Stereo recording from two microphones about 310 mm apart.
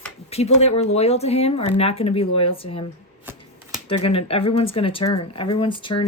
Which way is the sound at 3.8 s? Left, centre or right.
Centre.